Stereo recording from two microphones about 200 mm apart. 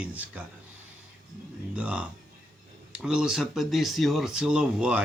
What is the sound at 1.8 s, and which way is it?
Speech, 5° right (ahead or behind).